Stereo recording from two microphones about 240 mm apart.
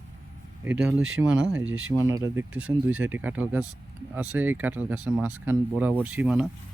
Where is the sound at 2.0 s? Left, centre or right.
Centre.